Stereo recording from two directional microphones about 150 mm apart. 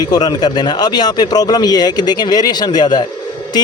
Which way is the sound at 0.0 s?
30° left (ahead or behind).